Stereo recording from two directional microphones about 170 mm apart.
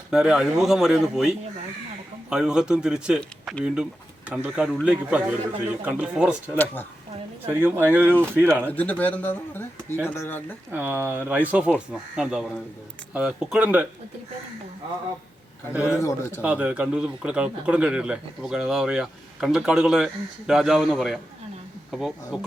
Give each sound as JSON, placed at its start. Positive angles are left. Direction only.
{"t": 0.1, "sound": "speech", "side_deg": -5}
{"t": 2.3, "sound": "speech", "side_deg": -5}
{"t": 8.7, "sound": "a man's voice", "side_deg": 10}
{"t": 10.7, "sound": "speech", "side_deg": -10}
{"t": 15.7, "sound": "speech", "side_deg": -5}
{"t": 16.0, "sound": "a man's voice", "side_deg": 20}
{"t": 16.4, "sound": "speech", "side_deg": -10}